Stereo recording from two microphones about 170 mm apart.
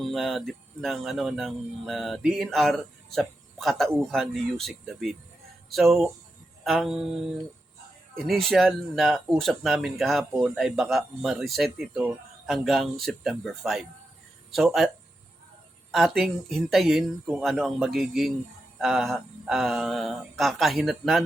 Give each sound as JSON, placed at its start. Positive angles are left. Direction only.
{"t": 0.0, "sound": "speech", "side_deg": 0}
{"t": 8.2, "sound": "speech", "side_deg": 0}
{"t": 15.9, "sound": "speech", "side_deg": 0}